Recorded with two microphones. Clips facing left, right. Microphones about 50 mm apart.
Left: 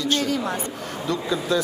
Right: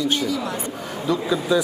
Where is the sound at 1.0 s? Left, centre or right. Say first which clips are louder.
Right 3 dB; centre.